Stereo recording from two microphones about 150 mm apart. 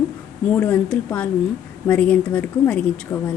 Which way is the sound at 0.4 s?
10° left (ahead or behind).